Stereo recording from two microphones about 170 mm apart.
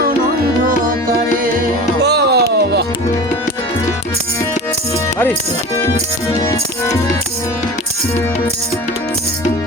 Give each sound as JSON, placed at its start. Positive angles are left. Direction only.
{"t": 2.0, "sound": "music", "side_deg": -80}